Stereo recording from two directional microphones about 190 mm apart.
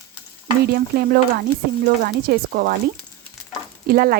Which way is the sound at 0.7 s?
55° right (ahead or behind).